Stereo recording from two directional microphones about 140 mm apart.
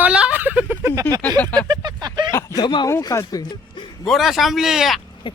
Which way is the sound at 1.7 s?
30° right (ahead or behind).